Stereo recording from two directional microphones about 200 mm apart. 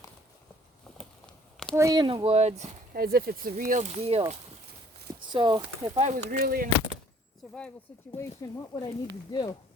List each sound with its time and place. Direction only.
1.7 s speech: 15° right (ahead or behind); by 2.7 s 35° right (ahead or behind)
2.9 s speech: 50° right (ahead or behind); by 6.1 s 30° right (ahead or behind)
6.4 s speech: 45° right (ahead or behind)
8.1 s speech: 15° left (ahead or behind)